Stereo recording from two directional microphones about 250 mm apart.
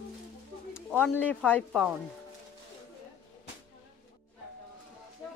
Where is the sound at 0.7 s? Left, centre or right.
Centre.